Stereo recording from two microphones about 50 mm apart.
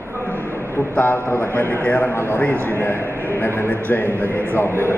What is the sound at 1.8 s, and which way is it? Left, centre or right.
Speech, left.